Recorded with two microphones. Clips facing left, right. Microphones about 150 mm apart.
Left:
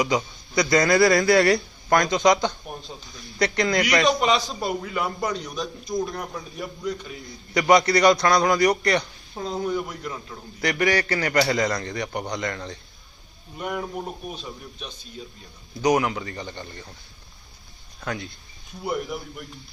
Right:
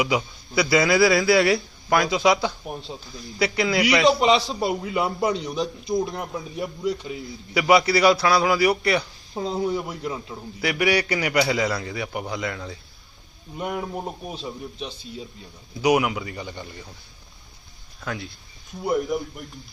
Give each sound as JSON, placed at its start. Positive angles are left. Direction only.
{"t": 0.0, "sound": "speech", "side_deg": -10}
{"t": 4.2, "sound": "a man's voice", "side_deg": -25}
{"t": 7.3, "sound": "speech", "side_deg": -5}
{"t": 9.3, "sound": "a man's voice", "side_deg": -30}
{"t": 10.6, "sound": "speech", "side_deg": -10}
{"t": 13.9, "sound": "a man's voice", "side_deg": -30}
{"t": 15.8, "sound": "speech", "side_deg": -10}
{"t": 18.0, "sound": "speech", "side_deg": 0}